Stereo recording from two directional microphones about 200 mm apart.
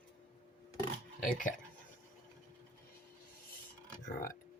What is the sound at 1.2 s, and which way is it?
Speech, 40° left (ahead or behind).